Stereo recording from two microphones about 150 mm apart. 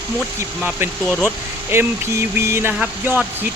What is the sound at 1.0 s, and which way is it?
Speech, 5° left (ahead or behind).